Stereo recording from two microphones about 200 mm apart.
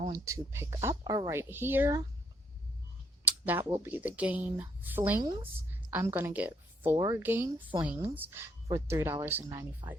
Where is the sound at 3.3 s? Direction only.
10° right (ahead or behind).